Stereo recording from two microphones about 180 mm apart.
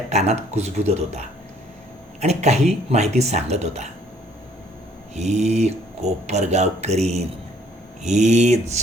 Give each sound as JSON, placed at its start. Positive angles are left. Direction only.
{"t": 0.1, "sound": "speech", "side_deg": -40}
{"t": 2.2, "sound": "speech", "side_deg": -40}
{"t": 5.1, "sound": "speech", "side_deg": -40}